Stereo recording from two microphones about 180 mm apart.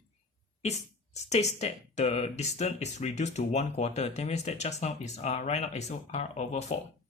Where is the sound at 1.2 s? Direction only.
40° left (ahead or behind).